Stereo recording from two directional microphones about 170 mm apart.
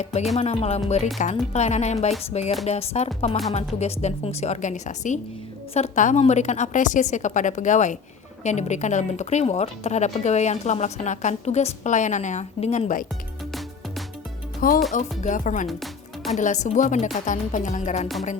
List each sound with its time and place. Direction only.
0.0 s speech: 40° left (ahead or behind)
14.6 s speech: 55° left (ahead or behind)
15.6 s music: centre (ahead or behind)
16.3 s speech: 45° left (ahead or behind)